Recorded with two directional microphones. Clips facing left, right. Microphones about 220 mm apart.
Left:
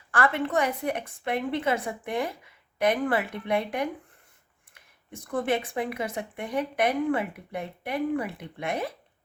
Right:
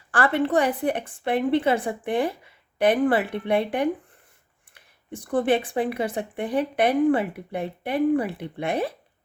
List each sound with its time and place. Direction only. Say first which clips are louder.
0.1 s speech: right 4 dB; 35° right (ahead or behind)